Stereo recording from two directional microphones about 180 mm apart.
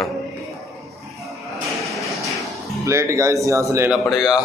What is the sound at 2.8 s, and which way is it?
Speech, 15° right (ahead or behind).